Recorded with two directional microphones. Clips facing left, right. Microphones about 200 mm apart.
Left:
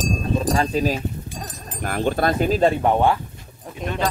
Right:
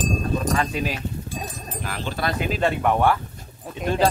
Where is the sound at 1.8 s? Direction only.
50° left (ahead or behind); by 3.1 s 25° left (ahead or behind).